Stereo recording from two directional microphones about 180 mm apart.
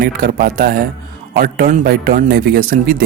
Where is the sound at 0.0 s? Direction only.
55° right (ahead or behind).